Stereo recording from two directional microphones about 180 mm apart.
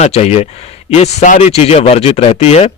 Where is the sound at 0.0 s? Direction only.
35° left (ahead or behind).